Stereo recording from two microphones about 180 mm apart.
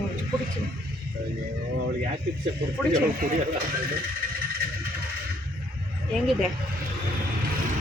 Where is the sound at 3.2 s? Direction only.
50° right (ahead or behind).